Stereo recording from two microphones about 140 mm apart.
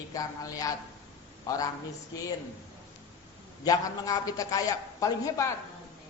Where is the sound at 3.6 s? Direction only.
25° left (ahead or behind).